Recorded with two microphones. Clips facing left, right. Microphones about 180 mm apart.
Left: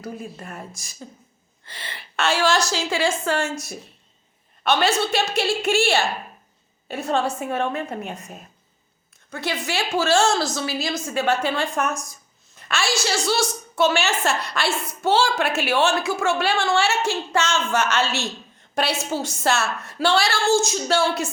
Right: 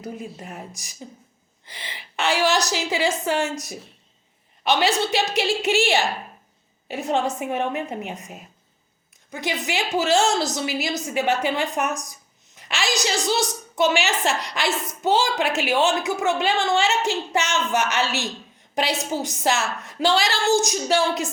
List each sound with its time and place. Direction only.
0.0 s a woman's voice: 20° right (ahead or behind)